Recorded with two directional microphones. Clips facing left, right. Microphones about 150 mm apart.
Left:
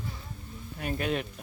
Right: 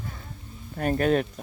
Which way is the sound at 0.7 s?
45° right (ahead or behind).